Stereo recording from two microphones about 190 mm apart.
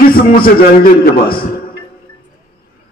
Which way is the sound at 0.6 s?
50° left (ahead or behind).